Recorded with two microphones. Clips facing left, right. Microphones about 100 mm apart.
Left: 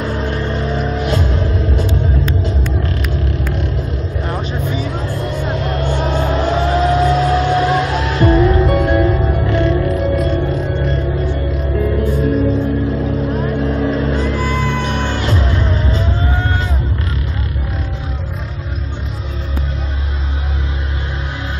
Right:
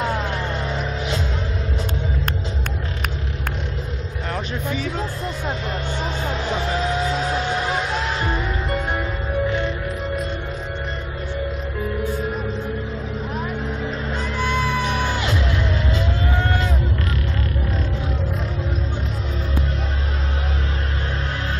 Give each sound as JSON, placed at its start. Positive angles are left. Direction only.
{"t": 0.7, "sound": "vehicle", "side_deg": 45}
{"t": 5.6, "sound": "vehicle", "side_deg": 60}
{"t": 14.7, "sound": "music", "side_deg": -10}
{"t": 15.1, "sound": "music", "side_deg": 40}